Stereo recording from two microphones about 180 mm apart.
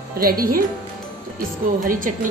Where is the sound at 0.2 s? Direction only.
55° right (ahead or behind).